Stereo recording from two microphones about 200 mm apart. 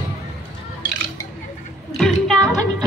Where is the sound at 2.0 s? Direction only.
Centre (ahead or behind).